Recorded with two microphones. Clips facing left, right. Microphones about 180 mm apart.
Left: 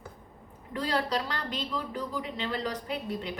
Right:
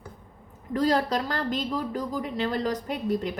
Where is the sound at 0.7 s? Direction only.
40° right (ahead or behind).